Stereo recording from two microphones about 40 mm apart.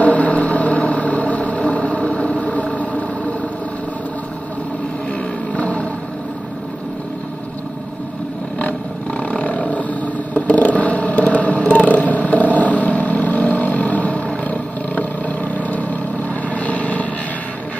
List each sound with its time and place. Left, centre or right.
0.0 s vehicle: left
5.5 s a sound: left
9.3 s roaring cats: left
10.3 s vehicle: left